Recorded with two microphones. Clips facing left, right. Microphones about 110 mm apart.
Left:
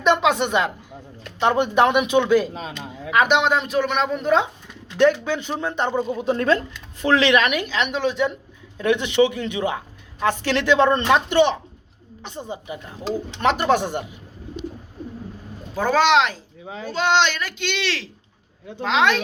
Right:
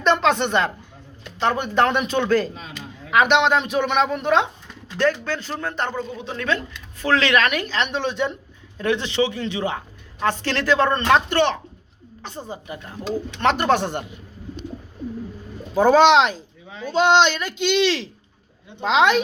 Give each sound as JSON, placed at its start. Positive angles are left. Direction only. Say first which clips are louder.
{"t": 0.0, "sound": "speech", "louder": "even", "side_deg": 10}
{"t": 1.4, "sound": "speech", "louder": "left 2 dB", "side_deg": 20}
{"t": 2.5, "sound": "speech", "louder": "left 5 dB", "side_deg": 70}
{"t": 3.1, "sound": "speech", "louder": "right 1 dB", "side_deg": 5}
{"t": 4.9, "sound": "speech", "louder": "left 4 dB", "side_deg": 15}
{"t": 6.1, "sound": "a woman's voice", "louder": "left 7 dB", "side_deg": 40}
{"t": 7.0, "sound": "speech", "louder": "left 2 dB", "side_deg": 20}
{"t": 8.8, "sound": "speech", "louder": "left 3 dB", "side_deg": 15}
{"t": 12.4, "sound": "speech", "louder": "left 2 dB", "side_deg": 20}
{"t": 15.7, "sound": "speech", "louder": "right 4 dB", "side_deg": -20}